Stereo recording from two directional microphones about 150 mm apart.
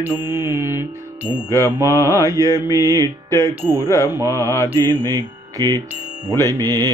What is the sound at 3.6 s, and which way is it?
Speech, 15° right (ahead or behind).